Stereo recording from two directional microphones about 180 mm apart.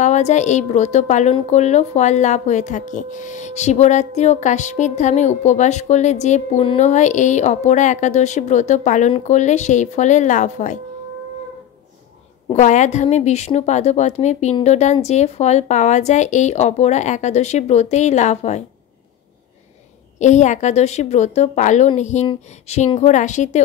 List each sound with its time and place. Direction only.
0.0 s a woman's voice: 40° left (ahead or behind)
12.5 s a woman's voice: 40° left (ahead or behind)
20.2 s a woman's voice: 40° left (ahead or behind)